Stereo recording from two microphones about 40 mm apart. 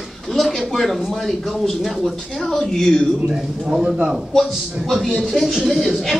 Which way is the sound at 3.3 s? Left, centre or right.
Centre.